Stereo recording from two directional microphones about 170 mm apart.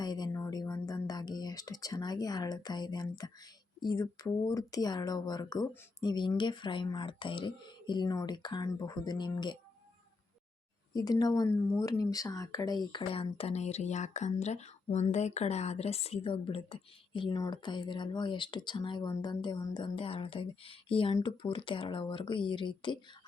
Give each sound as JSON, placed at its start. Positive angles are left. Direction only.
{"t": 0.0, "sound": "a sound", "side_deg": 25}
{"t": 3.8, "sound": "speech", "side_deg": 25}
{"t": 10.9, "sound": "speech", "side_deg": 20}